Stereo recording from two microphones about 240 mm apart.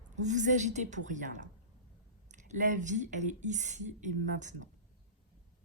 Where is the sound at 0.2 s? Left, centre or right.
Right.